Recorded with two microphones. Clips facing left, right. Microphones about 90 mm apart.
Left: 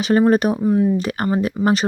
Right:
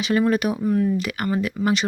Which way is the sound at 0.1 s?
35° left (ahead or behind).